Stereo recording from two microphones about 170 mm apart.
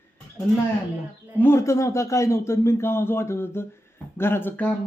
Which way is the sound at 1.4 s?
15° left (ahead or behind).